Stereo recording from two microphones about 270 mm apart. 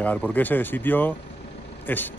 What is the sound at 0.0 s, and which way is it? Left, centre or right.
Speech, centre.